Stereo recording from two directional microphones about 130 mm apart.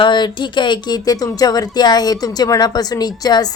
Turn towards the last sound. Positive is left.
turn(degrees=30)  # may be behind; listen again after turning